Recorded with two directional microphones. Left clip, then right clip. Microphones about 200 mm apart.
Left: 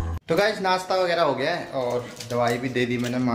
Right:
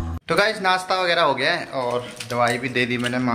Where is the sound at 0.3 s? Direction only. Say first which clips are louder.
Right 2 dB; centre (ahead or behind).